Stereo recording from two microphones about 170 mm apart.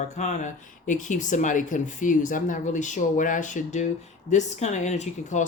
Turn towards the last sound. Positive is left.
turn(degrees=45)  # may be behind; listen again after turning